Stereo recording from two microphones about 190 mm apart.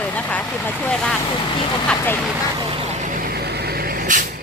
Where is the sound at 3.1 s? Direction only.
50° right (ahead or behind).